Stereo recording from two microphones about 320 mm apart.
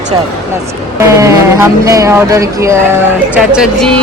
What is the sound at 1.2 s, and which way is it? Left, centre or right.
Speech, centre.